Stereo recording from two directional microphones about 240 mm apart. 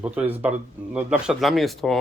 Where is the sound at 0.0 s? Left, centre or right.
Centre.